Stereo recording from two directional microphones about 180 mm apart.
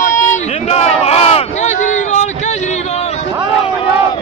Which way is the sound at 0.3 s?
35° left (ahead or behind).